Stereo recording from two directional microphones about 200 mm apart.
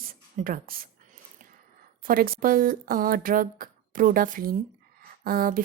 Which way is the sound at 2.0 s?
45° right (ahead or behind).